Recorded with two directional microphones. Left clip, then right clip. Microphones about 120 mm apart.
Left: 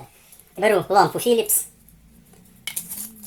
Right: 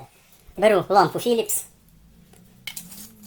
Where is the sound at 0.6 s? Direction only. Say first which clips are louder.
Even; 30° right (ahead or behind).